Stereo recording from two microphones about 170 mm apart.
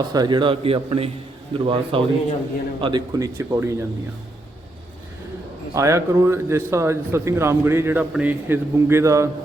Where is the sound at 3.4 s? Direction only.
15° right (ahead or behind).